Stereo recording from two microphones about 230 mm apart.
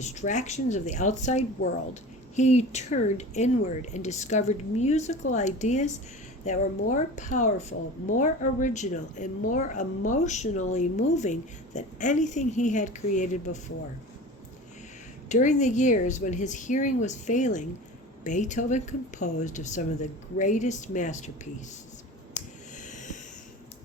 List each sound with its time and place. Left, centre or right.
0.0 s a woman's voice: left
15.3 s a woman's voice: left
22.4 s a sound: left